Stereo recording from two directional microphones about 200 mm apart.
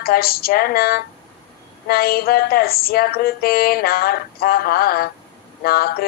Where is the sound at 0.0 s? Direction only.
50° left (ahead or behind).